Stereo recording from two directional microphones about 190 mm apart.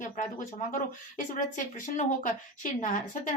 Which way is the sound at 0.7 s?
45° left (ahead or behind).